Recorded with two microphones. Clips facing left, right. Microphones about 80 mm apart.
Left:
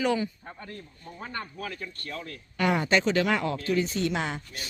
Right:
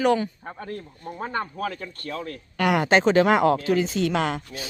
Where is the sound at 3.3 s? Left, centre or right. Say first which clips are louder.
Right 7 dB; right.